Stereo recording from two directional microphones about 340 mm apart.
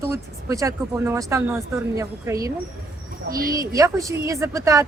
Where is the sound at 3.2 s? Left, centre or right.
Right.